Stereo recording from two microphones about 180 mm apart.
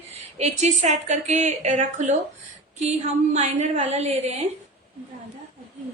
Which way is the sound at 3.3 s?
40° right (ahead or behind).